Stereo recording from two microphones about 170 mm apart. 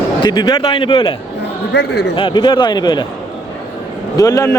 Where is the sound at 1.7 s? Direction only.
80° left.